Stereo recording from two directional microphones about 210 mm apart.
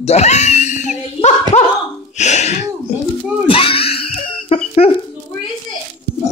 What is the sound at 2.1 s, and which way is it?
Sneeze, 35° left (ahead or behind).